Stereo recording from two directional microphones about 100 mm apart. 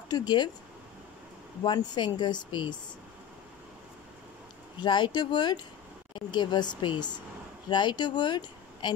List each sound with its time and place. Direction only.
0.1 s speech: 45° left (ahead or behind)
1.6 s speech: 50° left (ahead or behind)
4.8 s speech: 50° left (ahead or behind)